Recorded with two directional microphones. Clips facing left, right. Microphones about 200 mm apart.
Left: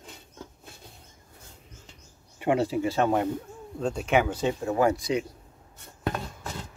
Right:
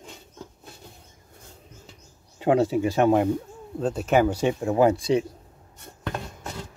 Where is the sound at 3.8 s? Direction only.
5° right (ahead or behind); by 5.2 s 30° right (ahead or behind).